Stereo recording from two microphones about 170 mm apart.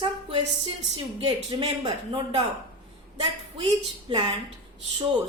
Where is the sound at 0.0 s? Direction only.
30° right (ahead or behind).